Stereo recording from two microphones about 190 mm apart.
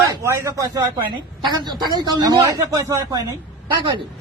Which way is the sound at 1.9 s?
20° right (ahead or behind).